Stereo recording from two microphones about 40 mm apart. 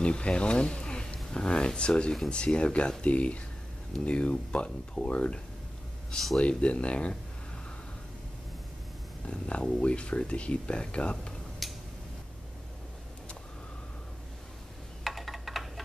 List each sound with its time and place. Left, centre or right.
0.0 s speech: left
9.2 s speech: left
11.6 s tick-tock: centre
15.0 s a sound: centre